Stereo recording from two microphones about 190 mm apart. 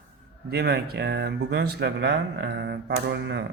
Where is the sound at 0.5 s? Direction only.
60° right (ahead or behind).